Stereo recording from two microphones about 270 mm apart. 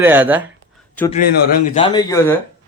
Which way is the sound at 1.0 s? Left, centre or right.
Centre.